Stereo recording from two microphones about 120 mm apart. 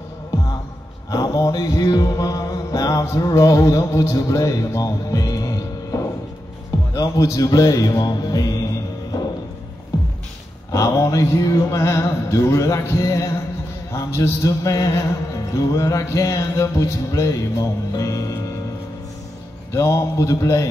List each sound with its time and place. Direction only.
1.1 s mantra: 30° left (ahead or behind)
6.9 s a man's voice: 30° left (ahead or behind)
7.3 s mantra: 30° left (ahead or behind)
10.7 s mantra: 25° left (ahead or behind)
19.7 s mantra: 25° left (ahead or behind)